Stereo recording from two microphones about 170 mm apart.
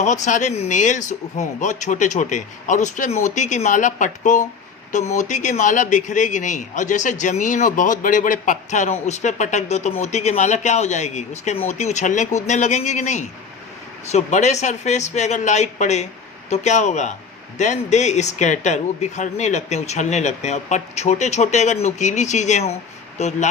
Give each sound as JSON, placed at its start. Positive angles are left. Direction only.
{"t": 0.0, "sound": "speech", "side_deg": 45}